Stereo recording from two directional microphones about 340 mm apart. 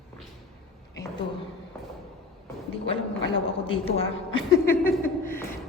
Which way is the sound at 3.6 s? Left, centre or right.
Centre.